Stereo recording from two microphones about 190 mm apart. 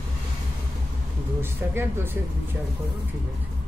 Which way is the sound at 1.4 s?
10° right (ahead or behind).